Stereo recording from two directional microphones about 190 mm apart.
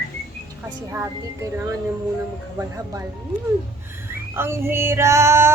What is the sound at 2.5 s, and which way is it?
Female singing, 15° right (ahead or behind).